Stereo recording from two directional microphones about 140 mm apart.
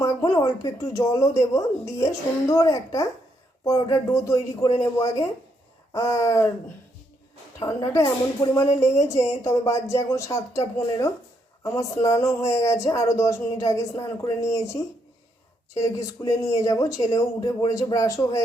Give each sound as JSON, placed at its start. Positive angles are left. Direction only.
{"t": 0.0, "sound": "a woman's voice", "side_deg": 25}
{"t": 7.6, "sound": "a woman's voice", "side_deg": 20}